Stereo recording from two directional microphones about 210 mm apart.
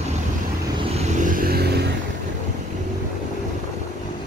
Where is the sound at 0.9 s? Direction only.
35° right (ahead or behind).